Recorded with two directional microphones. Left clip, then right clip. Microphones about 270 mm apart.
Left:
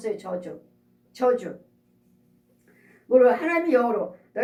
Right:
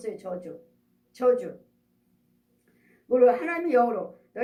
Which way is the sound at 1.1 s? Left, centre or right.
Right.